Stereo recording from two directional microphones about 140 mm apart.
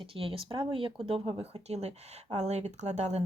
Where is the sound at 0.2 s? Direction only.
40° right (ahead or behind).